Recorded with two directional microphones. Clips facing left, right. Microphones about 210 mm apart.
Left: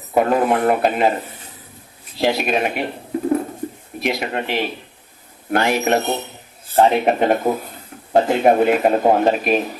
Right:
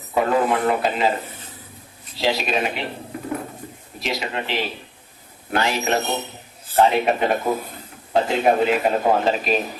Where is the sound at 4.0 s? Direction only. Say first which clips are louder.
Left 4 dB; 55° left (ahead or behind).